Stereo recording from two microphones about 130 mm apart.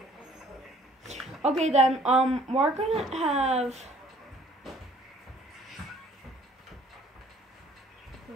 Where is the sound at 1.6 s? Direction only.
60° right (ahead or behind).